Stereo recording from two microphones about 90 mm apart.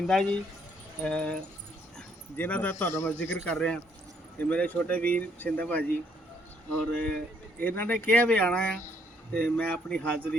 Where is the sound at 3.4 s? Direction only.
10° left (ahead or behind).